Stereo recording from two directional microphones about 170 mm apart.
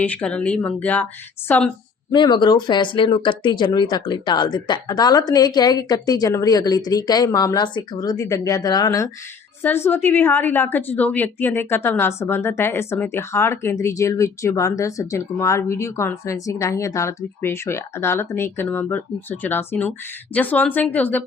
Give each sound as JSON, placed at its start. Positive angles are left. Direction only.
{"t": 0.0, "sound": "a woman's voice", "side_deg": 10}
{"t": 2.1, "sound": "a woman's voice", "side_deg": 25}